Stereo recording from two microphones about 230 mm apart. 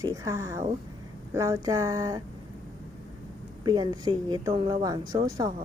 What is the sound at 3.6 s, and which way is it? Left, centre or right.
A woman's voice, centre.